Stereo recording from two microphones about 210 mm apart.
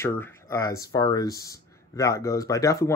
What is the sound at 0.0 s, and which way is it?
Speech, 15° left (ahead or behind).